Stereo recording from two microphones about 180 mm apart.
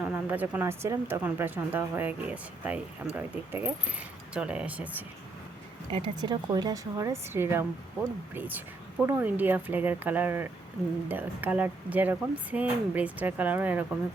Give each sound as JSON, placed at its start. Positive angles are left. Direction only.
{"t": 0.0, "sound": "speech", "side_deg": -10}
{"t": 5.9, "sound": "a woman's voice", "side_deg": -25}